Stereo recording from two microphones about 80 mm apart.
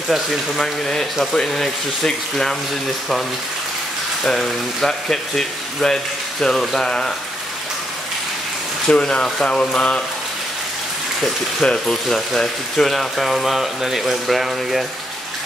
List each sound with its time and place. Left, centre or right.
0.1 s speech: centre
4.2 s speech: centre
8.8 s speech: centre
11.1 s speech: centre